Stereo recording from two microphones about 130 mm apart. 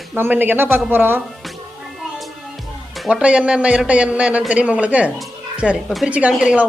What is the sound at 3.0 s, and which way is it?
Speech, 5° right (ahead or behind).